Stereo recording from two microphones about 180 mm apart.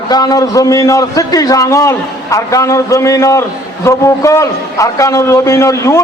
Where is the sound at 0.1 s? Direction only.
20° left (ahead or behind).